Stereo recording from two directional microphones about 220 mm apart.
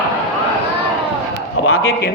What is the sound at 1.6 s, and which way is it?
Speech, 70° left (ahead or behind).